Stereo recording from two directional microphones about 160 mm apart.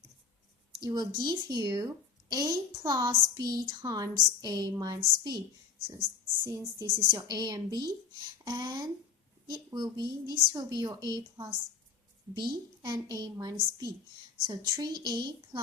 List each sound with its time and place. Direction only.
0.8 s a woman's voice: 25° right (ahead or behind)
6.4 s a woman's voice: 25° right (ahead or behind)